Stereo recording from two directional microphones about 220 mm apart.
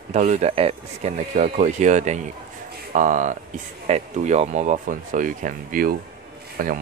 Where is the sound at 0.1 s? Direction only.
30° right (ahead or behind).